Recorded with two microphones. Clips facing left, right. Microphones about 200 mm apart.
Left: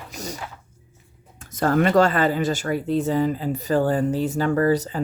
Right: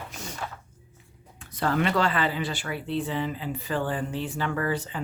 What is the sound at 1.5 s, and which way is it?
Speech, 45° left (ahead or behind).